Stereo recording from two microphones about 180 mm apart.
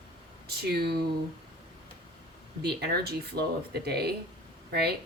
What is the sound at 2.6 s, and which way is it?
A woman's voice, 65° right (ahead or behind).